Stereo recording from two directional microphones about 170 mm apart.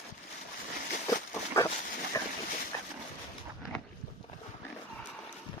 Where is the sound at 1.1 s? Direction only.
15° left (ahead or behind).